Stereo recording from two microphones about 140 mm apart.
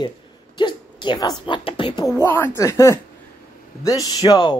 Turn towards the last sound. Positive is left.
turn(degrees=30)  # may be behind; listen again after turning